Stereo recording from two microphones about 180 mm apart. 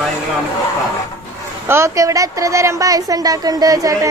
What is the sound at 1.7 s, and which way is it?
A woman's voice, 15° right (ahead or behind).